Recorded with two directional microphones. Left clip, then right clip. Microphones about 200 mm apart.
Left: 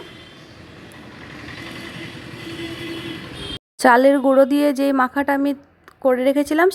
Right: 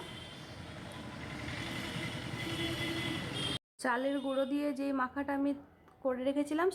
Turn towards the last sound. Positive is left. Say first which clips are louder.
# left 16 dB
turn(degrees=30)  # may be behind; listen again after turning